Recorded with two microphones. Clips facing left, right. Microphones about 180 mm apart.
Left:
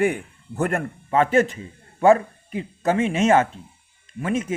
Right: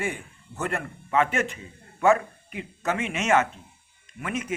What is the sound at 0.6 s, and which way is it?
Speech, 45° left (ahead or behind).